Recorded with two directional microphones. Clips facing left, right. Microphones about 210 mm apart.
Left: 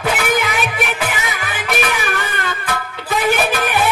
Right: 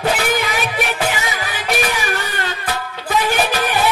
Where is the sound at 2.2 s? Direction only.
50° left (ahead or behind).